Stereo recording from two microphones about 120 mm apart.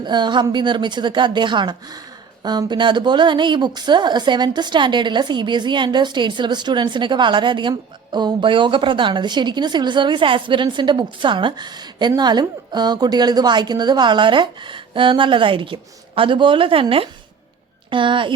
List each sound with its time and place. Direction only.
0.0 s a woman's voice: 40° right (ahead or behind)